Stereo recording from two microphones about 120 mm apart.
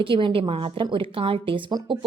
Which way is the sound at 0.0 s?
45° right (ahead or behind).